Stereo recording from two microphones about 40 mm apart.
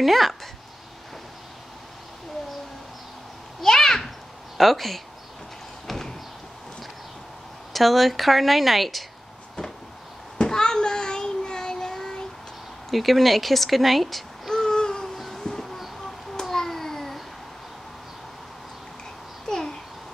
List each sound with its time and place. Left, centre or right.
0.0 s speech: centre
3.6 s a sound: centre
4.6 s speech: centre
5.9 s door: centre
7.7 s speech: centre
10.3 s child singing: centre
12.9 s speech: centre
14.5 s a sound: centre
15.1 s a sound: centre
19.4 s babbling: centre